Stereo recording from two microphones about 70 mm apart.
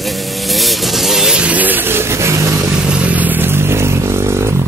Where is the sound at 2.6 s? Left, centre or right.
Centre.